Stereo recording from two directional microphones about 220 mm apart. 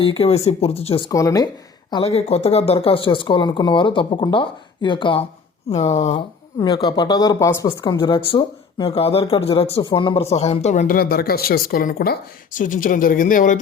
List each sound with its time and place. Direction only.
0.0 s speech: 25° left (ahead or behind)
1.9 s speech: 25° left (ahead or behind)